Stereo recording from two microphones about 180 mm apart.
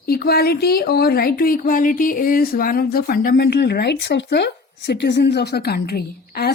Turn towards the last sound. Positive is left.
turn(degrees=60)  # may be behind; listen again after turning